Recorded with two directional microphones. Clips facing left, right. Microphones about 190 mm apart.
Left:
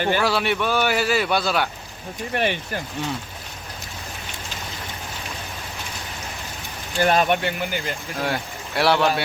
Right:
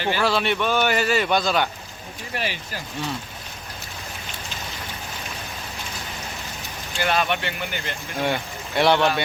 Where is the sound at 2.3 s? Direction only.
60° left (ahead or behind).